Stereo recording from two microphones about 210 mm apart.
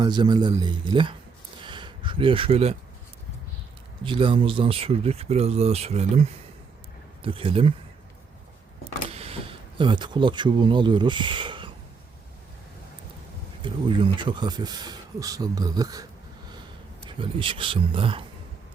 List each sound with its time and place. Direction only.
0.0 s speech: 20° right (ahead or behind)
1.6 s a sound: 20° right (ahead or behind)
4.0 s speech: 25° right (ahead or behind)
9.1 s speech: 30° right (ahead or behind)
13.6 s speech: 25° right (ahead or behind)
17.2 s speech: 25° right (ahead or behind)